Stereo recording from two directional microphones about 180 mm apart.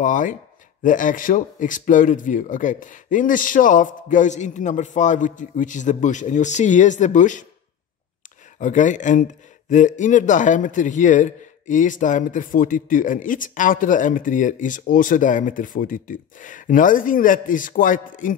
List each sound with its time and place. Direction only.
0.0 s speech: 45° left (ahead or behind)
8.5 s speech: 45° left (ahead or behind)